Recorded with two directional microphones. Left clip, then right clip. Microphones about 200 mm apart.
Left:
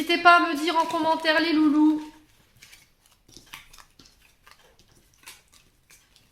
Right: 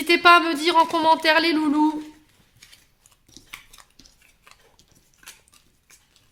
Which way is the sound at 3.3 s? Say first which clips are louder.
Right 2 dB; 15° right (ahead or behind).